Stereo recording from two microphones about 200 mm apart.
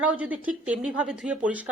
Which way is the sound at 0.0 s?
5° right (ahead or behind).